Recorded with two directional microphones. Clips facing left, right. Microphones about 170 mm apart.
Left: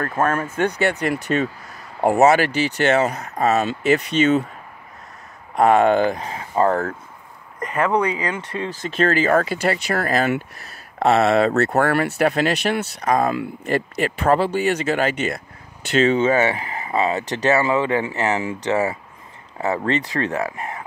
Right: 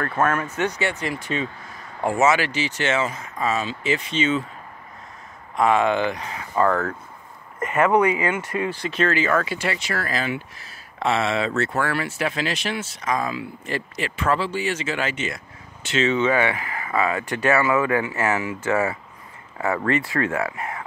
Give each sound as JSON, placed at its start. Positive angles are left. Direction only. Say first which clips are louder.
{"t": 0.2, "sound": "speech", "louder": "left 1 dB", "side_deg": 30}
{"t": 0.5, "sound": "speech", "louder": "left 4 dB", "side_deg": 55}
{"t": 1.2, "sound": "speech", "louder": "left 6 dB", "side_deg": 50}
{"t": 2.0, "sound": "speech", "louder": "left 5 dB", "side_deg": 60}
{"t": 3.3, "sound": "speech", "louder": "left 6 dB", "side_deg": 65}
{"t": 5.6, "sound": "speech", "louder": "left 4 dB", "side_deg": 50}
{"t": 7.5, "sound": "speech", "louder": "right 2 dB", "side_deg": -5}
{"t": 8.9, "sound": "speech", "louder": "left 5 dB", "side_deg": 40}
{"t": 16.1, "sound": "speech", "louder": "left 1 dB", "side_deg": 35}
{"t": 16.5, "sound": "speech", "louder": "left 2 dB", "side_deg": 20}